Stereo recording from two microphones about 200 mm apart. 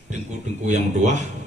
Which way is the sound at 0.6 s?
35° right (ahead or behind).